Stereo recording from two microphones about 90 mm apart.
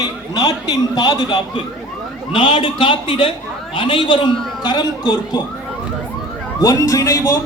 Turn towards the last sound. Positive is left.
turn(degrees=35)  # may be behind; listen again after turning